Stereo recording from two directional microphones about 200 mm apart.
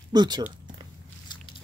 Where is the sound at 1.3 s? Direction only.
20° left (ahead or behind).